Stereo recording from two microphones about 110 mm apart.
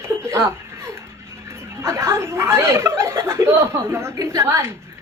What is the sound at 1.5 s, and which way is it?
A woman's voice, 25° right (ahead or behind).